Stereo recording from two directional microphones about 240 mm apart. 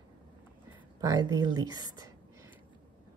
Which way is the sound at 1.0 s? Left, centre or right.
Centre.